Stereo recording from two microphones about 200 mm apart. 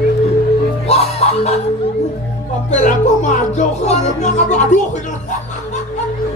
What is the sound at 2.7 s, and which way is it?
Speech, 35° left (ahead or behind).